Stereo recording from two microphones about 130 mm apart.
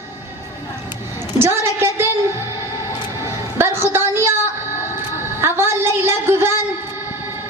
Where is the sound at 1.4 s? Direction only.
20° right (ahead or behind).